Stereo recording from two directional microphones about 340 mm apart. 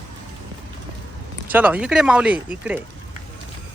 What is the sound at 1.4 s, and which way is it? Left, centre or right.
Speech, centre.